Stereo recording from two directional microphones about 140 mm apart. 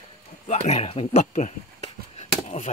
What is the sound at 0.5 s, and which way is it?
Speech, 50° left (ahead or behind).